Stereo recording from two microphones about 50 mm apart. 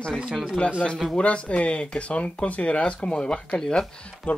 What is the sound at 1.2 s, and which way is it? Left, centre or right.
Speech, left.